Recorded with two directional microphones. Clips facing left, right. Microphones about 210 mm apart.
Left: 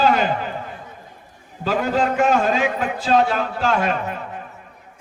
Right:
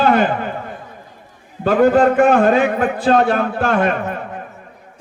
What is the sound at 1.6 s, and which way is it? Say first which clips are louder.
A man's voice: right 8 dB; 55° right (ahead or behind).